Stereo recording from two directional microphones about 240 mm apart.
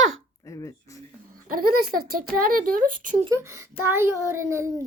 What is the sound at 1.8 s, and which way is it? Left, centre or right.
Speech, right.